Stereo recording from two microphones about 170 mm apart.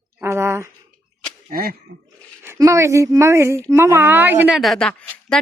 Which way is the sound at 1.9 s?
85° right.